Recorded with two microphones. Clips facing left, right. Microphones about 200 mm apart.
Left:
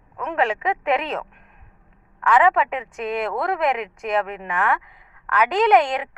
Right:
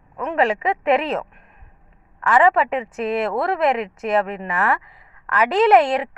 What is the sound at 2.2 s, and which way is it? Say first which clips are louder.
A woman's voice: right 1 dB; 5° right (ahead or behind).